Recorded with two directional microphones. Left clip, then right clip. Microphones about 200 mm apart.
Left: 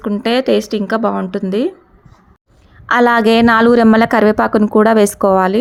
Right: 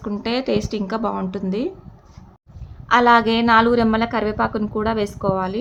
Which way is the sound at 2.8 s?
40° left (ahead or behind).